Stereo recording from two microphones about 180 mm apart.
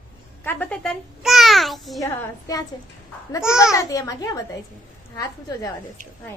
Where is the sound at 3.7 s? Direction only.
20° left (ahead or behind).